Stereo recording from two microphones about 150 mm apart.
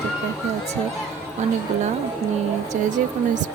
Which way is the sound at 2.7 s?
55° right (ahead or behind).